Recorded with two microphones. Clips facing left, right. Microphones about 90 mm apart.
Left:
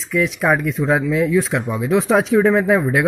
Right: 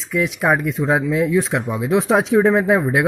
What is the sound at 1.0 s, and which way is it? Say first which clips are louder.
Speech: left 1 dB; 25° right (ahead or behind).